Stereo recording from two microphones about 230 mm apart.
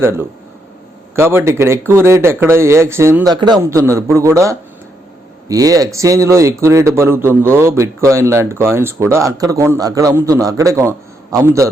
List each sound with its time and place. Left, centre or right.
0.0 s speech: centre